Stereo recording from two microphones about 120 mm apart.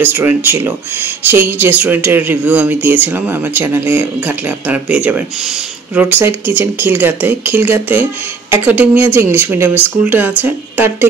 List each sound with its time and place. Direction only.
0.0 s speech: 15° right (ahead or behind)